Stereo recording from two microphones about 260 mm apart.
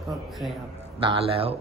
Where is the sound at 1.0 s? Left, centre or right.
Right.